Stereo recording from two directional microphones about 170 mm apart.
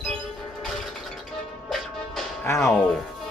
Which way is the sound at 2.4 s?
15° left (ahead or behind).